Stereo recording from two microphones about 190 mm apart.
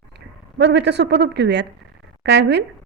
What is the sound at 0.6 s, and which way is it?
A woman's voice, 65° right (ahead or behind).